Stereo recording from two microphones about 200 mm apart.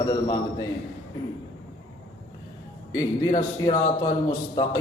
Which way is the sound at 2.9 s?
15° left (ahead or behind).